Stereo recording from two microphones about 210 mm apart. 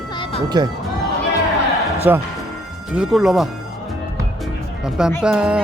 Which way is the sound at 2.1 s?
10° right (ahead or behind).